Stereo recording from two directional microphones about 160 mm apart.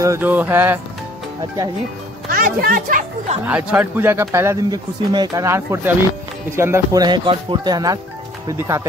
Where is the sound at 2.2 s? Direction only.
65° right (ahead or behind).